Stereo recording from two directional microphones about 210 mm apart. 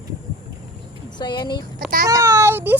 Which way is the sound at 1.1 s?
20° left (ahead or behind).